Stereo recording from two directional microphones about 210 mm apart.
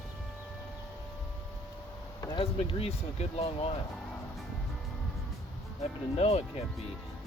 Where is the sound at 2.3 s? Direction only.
25° left (ahead or behind).